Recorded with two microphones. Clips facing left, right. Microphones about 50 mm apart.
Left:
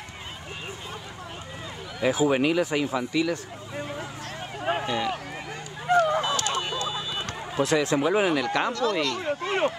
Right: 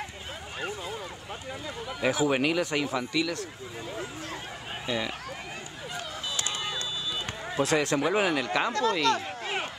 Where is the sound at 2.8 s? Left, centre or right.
Left.